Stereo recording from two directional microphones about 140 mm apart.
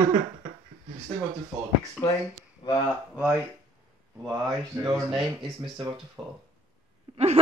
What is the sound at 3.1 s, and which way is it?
Speech, 10° right (ahead or behind).